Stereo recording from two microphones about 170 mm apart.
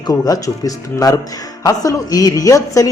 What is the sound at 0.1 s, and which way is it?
Speech, 20° left (ahead or behind).